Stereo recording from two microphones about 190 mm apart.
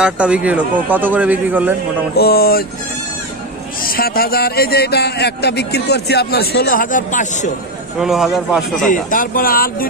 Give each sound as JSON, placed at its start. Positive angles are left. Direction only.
{"t": 0.0, "sound": "a man's voice", "side_deg": -5}
{"t": 2.1, "sound": "speech", "side_deg": 55}
{"t": 3.8, "sound": "a man's voice", "side_deg": 50}
{"t": 8.0, "sound": "a man's voice", "side_deg": 0}
{"t": 8.8, "sound": "speech", "side_deg": 45}